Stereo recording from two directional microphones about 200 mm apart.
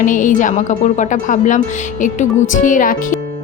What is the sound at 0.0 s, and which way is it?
A woman's voice, 40° left (ahead or behind).